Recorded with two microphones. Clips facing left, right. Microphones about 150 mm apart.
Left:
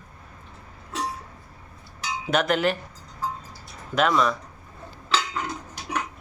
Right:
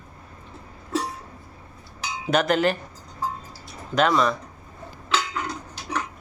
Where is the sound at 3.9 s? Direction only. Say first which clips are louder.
Right 1 dB; centre (ahead or behind).